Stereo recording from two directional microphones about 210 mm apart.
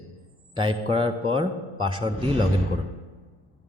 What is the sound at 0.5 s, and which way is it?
A man's voice, 25° right (ahead or behind).